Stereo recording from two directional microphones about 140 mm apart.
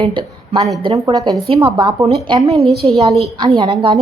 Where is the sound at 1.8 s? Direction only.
30° right (ahead or behind).